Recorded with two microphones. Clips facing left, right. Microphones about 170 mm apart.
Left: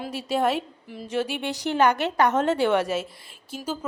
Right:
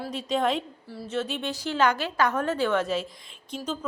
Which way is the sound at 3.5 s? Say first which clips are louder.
Left 1 dB; 10° left (ahead or behind).